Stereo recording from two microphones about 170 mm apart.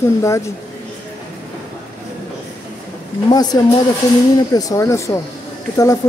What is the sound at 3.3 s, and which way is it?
Speech, 25° left (ahead or behind).